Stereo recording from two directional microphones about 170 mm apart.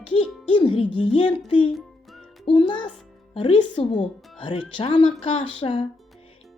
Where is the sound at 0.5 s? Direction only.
30° left (ahead or behind).